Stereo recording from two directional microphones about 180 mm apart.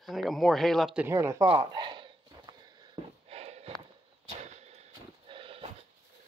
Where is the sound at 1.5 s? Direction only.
25° right (ahead or behind).